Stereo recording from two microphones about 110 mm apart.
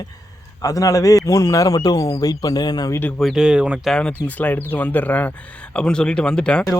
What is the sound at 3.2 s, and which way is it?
Speech, 5° right (ahead or behind).